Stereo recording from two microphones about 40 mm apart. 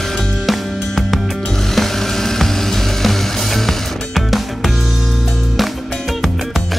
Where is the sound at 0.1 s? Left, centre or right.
Centre.